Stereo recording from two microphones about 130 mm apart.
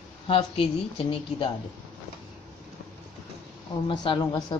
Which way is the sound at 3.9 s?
35° left (ahead or behind).